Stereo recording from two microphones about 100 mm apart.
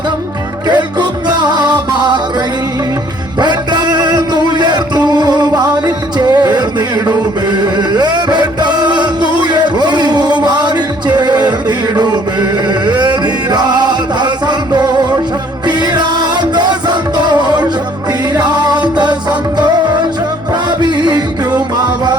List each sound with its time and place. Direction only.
0.7 s music: 45° right (ahead or behind)
3.4 s music: 45° right (ahead or behind)
20.7 s music: 45° right (ahead or behind)